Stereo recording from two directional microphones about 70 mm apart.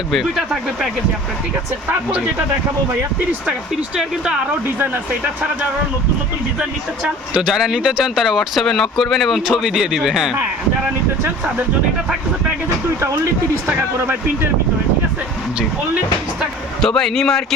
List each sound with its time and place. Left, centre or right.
0.1 s speech: centre
6.6 s speech: centre
7.5 s speech: centre
13.0 s speech: right
13.7 s speech: right
16.8 s a man's voice: centre